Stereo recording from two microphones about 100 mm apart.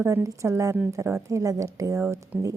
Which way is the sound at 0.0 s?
30° right (ahead or behind).